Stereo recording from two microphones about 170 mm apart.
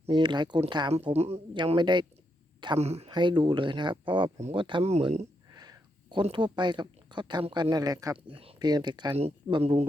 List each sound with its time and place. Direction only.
0.0 s speech: 25° right (ahead or behind)
1.1 s speech: 35° right (ahead or behind)
4.4 s speech: 40° right (ahead or behind)
5.5 s speech: 20° right (ahead or behind)